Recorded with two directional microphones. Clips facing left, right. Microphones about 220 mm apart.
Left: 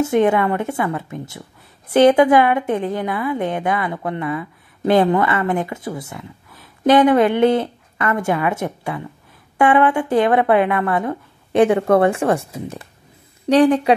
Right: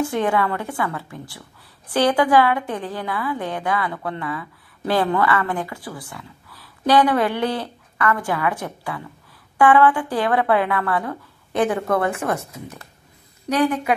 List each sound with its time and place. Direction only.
0.0 s a woman's voice: 25° left (ahead or behind)